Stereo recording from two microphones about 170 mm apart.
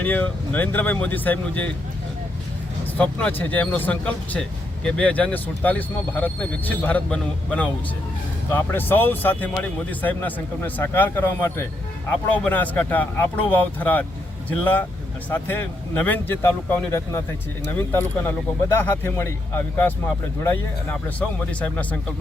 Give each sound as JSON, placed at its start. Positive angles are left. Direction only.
{"t": 0.0, "sound": "speech", "side_deg": 10}
{"t": 2.8, "sound": "speech", "side_deg": 10}